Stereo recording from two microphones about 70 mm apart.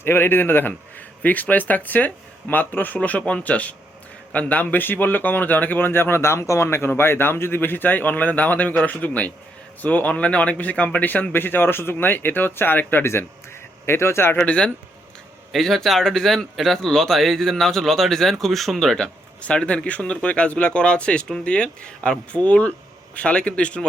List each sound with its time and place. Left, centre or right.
0.0 s a man's voice: left
14.3 s speech: centre
15.5 s speech: centre
19.4 s speech: centre